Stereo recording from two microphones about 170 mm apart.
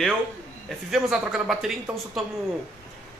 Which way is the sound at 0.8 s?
Centre (ahead or behind).